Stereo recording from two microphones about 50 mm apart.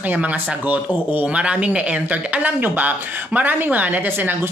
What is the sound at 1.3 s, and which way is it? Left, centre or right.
Speech, right.